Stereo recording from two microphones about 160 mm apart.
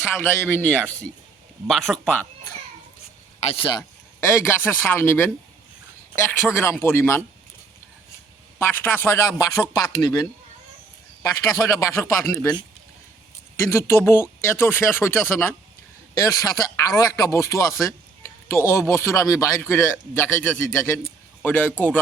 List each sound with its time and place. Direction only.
0.2 s speech: 15° left (ahead or behind)
1.6 s speech: centre (ahead or behind)
3.4 s speech: 35° left (ahead or behind)
4.2 s speech: 15° left (ahead or behind)
6.5 s speech: 15° left (ahead or behind)
8.5 s speech: 15° left (ahead or behind)
13.7 s speech: 15° left (ahead or behind)